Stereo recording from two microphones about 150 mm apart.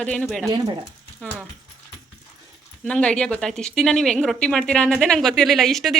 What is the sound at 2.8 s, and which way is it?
Speech, 5° left (ahead or behind).